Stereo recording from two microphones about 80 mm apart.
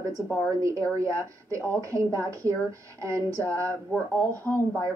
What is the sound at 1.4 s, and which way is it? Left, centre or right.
A woman's voice, right.